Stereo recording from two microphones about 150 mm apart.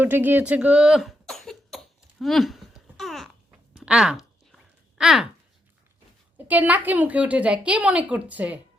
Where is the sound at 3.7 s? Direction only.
5° right (ahead or behind).